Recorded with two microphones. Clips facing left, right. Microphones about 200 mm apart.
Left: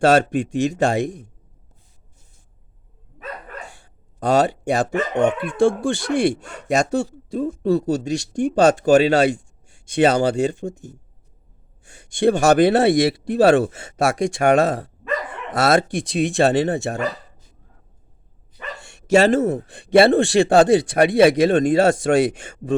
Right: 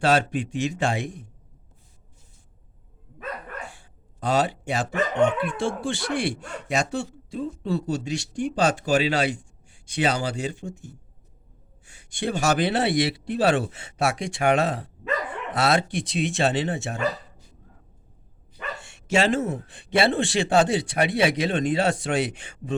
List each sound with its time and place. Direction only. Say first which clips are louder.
0.0 s speech: left 6 dB; 45° left (ahead or behind)
4.2 s speech: left 6 dB; 45° left (ahead or behind)
19.1 s speech: left 7 dB; 40° left (ahead or behind)